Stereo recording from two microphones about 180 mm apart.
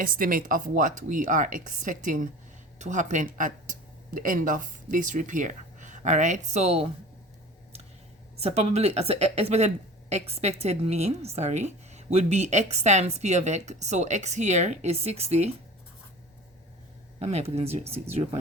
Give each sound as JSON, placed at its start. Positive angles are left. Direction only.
{"t": 0.0, "sound": "speech", "side_deg": -50}
{"t": 8.4, "sound": "speech", "side_deg": -35}
{"t": 17.2, "sound": "speech", "side_deg": -35}